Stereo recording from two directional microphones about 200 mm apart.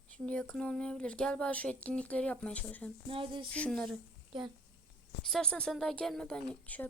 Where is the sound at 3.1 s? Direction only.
25° right (ahead or behind).